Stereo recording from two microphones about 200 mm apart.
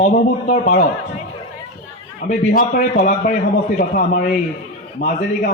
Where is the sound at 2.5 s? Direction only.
45° left (ahead or behind).